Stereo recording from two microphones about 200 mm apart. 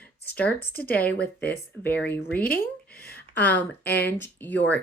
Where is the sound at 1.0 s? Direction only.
5° left (ahead or behind).